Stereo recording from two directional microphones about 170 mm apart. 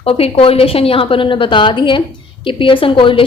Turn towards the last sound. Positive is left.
turn(degrees=30)  # may be behind; listen again after turning